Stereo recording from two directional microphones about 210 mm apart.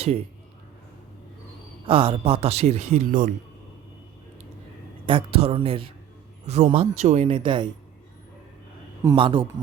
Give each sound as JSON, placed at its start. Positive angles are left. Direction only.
{"t": 1.9, "sound": "speech", "side_deg": -25}
{"t": 5.0, "sound": "speech", "side_deg": -25}
{"t": 9.1, "sound": "speech", "side_deg": -25}